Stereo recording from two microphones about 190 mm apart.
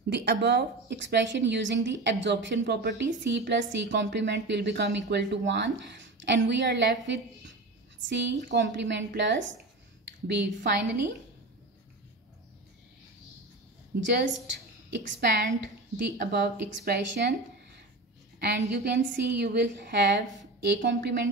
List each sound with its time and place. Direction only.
0.1 s a woman's voice: 60° right (ahead or behind)
10.2 s speech: 65° right (ahead or behind)
14.0 s speech: 65° right (ahead or behind)